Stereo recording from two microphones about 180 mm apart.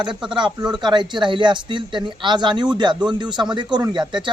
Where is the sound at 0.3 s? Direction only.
25° right (ahead or behind).